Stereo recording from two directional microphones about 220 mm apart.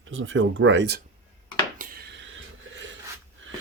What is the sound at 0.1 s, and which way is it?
Speech, 65° right (ahead or behind).